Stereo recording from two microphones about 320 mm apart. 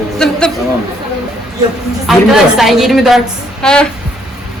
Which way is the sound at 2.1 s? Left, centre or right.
Centre.